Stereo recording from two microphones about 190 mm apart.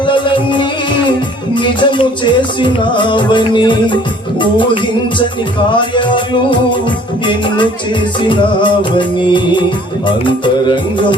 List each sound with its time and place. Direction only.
0.1 s music: 25° left (ahead or behind)
5.7 s music: 25° left (ahead or behind)